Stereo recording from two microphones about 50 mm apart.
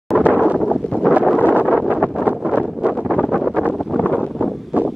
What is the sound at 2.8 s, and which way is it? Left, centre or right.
Wind noise, right.